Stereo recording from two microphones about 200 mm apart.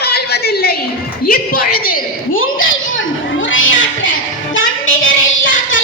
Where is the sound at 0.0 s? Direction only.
55° left (ahead or behind).